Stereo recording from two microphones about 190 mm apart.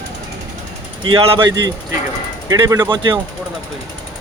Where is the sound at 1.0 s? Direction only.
25° right (ahead or behind).